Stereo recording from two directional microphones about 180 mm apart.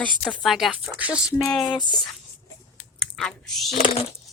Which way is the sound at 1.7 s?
25° left (ahead or behind).